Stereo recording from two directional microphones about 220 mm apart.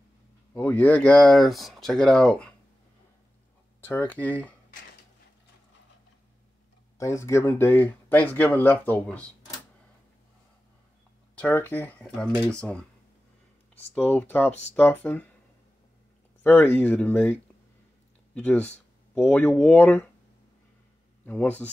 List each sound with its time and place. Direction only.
0.6 s speech: 10° left (ahead or behind)
3.8 s speech: 10° left (ahead or behind)
7.0 s speech: 15° left (ahead or behind)
11.3 s speech: 5° left (ahead or behind)
13.9 s speech: 5° left (ahead or behind)
16.4 s speech: 10° left (ahead or behind)
21.3 s speech: 5° left (ahead or behind)